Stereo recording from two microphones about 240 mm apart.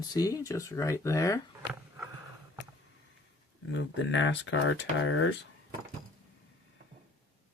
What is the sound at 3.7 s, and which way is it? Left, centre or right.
Speech, left.